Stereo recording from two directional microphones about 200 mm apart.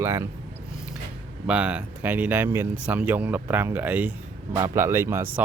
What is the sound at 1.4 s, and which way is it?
Speech, 5° right (ahead or behind).